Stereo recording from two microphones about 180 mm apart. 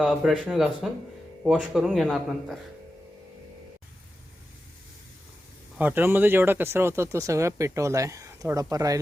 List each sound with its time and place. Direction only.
0.0 s speech: centre (ahead or behind)
5.7 s speech: 10° right (ahead or behind)